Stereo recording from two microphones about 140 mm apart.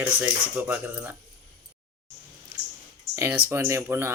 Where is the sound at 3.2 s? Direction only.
15° right (ahead or behind).